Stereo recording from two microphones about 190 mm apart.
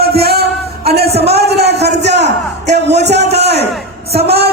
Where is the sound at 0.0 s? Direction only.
55° right (ahead or behind).